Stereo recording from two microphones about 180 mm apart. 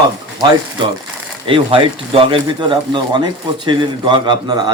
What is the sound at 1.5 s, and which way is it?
Speech, 30° right (ahead or behind).